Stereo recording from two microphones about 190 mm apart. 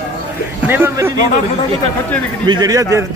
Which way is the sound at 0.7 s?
15° right (ahead or behind).